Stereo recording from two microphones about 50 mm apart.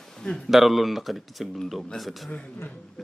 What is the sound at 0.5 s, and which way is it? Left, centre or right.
A man's voice, centre.